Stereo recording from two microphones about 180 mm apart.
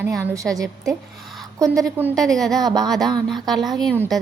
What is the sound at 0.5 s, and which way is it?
Speech, 20° right (ahead or behind).